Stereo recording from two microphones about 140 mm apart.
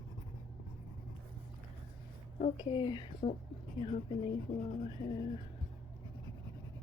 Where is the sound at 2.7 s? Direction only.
35° left (ahead or behind).